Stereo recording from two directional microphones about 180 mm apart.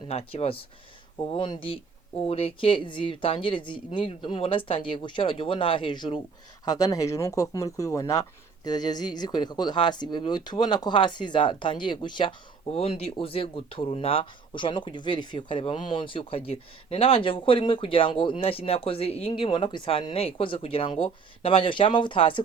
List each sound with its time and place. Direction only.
0.1 s speech: 35° left (ahead or behind)